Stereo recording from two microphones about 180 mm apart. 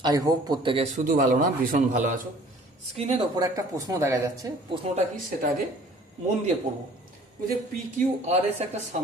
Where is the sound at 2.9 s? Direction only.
35° right (ahead or behind).